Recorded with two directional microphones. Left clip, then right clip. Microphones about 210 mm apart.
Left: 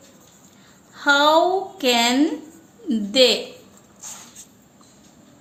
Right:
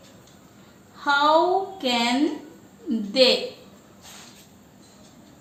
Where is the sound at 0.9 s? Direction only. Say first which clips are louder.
Left 3 dB; 55° left (ahead or behind).